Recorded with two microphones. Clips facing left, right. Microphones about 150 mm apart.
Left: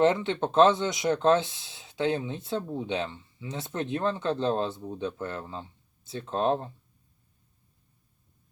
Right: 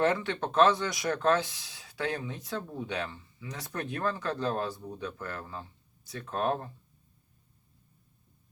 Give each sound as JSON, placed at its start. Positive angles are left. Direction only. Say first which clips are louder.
{"t": 0.0, "sound": "speech", "louder": "left 4 dB", "side_deg": 25}